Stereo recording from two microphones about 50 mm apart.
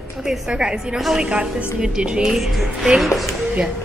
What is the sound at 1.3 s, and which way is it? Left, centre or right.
A woman's voice, centre.